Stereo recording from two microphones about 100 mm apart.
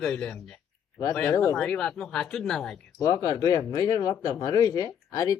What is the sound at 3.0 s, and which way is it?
Speech, 35° left (ahead or behind).